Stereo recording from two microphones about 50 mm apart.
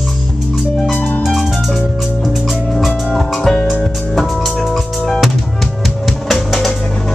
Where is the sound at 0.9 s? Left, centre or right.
Left.